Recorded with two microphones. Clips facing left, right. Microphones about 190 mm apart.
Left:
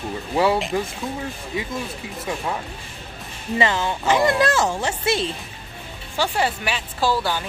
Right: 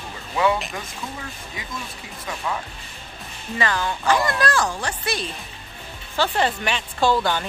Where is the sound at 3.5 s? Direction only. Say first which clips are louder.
Left 3 dB; 20° left (ahead or behind).